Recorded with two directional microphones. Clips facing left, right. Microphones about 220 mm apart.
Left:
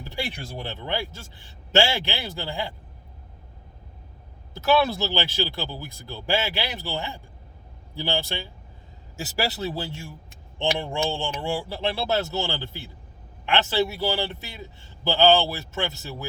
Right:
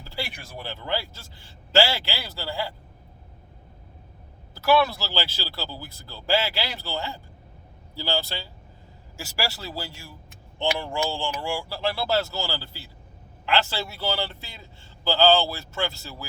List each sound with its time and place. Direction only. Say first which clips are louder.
0.0 s a man's voice: left 3 dB; 20° left (ahead or behind)
4.6 s a man's voice: even; 20° left (ahead or behind)